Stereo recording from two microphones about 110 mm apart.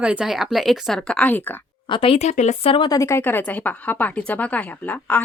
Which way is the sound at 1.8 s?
50° left (ahead or behind).